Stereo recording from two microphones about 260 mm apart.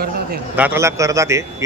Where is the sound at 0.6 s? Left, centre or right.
Centre.